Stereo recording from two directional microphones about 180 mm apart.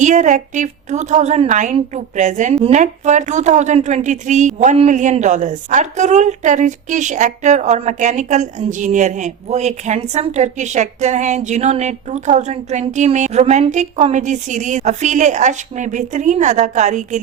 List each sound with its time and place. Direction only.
0.0 s a woman's voice: 45° right (ahead or behind)